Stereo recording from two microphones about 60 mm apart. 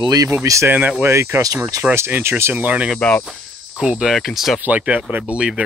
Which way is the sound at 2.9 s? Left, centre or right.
Centre.